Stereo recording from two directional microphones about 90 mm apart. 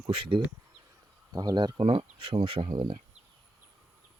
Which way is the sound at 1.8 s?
80° right.